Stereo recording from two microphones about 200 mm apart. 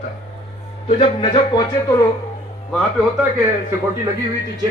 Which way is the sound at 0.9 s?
30° left (ahead or behind).